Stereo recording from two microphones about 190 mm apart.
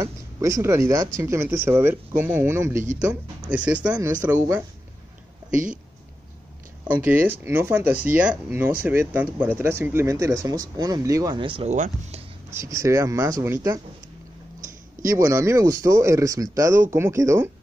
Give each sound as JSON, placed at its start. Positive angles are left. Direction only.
{"t": 0.0, "sound": "speech", "side_deg": -15}
{"t": 5.5, "sound": "speech", "side_deg": -45}
{"t": 6.9, "sound": "speech", "side_deg": -10}
{"t": 11.7, "sound": "speech", "side_deg": -40}
{"t": 12.4, "sound": "speech", "side_deg": -15}
{"t": 15.0, "sound": "speech", "side_deg": -15}